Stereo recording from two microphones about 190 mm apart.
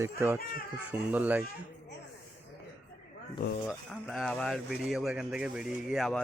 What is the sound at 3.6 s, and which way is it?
Speech, 5° left (ahead or behind).